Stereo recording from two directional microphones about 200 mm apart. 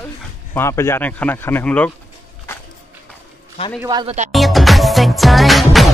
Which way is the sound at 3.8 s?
20° right (ahead or behind).